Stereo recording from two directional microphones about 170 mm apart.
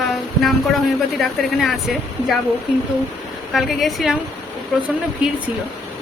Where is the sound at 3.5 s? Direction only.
Centre (ahead or behind).